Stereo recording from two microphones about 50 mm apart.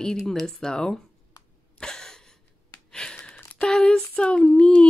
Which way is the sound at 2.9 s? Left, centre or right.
Centre.